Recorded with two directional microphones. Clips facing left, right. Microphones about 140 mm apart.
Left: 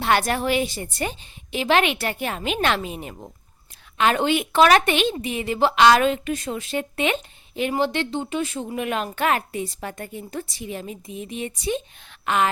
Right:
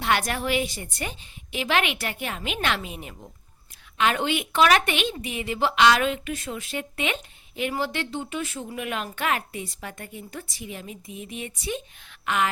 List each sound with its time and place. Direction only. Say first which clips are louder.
0.0 s speech: left 4 dB; 35° left (ahead or behind)